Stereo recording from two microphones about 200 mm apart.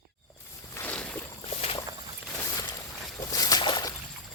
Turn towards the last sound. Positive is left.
turn(degrees=20)  # may be behind; listen again after turning